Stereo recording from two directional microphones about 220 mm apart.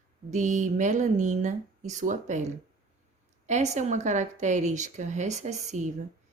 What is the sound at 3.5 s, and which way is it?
A woman's voice, 30° right (ahead or behind).